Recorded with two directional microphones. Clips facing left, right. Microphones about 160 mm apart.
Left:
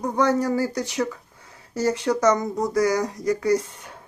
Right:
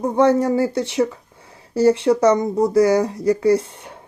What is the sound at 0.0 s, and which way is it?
Speech, 25° right (ahead or behind).